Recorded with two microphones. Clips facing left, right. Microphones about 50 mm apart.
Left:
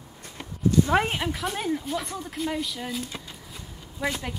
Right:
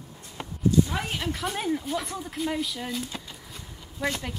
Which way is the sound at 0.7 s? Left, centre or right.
Left.